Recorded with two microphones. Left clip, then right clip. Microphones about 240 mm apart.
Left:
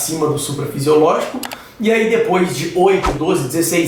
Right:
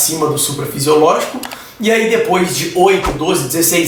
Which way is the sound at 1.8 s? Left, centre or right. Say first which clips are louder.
Right 2 dB; centre.